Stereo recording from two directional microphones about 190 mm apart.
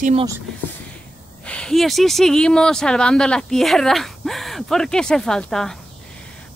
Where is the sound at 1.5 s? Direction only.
5° left (ahead or behind).